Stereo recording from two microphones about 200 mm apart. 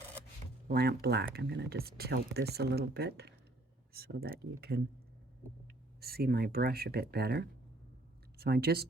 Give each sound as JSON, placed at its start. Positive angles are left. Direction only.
{"t": 0.7, "sound": "speech", "side_deg": -50}
{"t": 6.0, "sound": "speech", "side_deg": -50}